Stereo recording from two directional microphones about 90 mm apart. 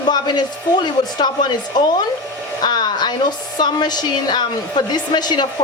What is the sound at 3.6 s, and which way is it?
A woman's voice, 55° left (ahead or behind).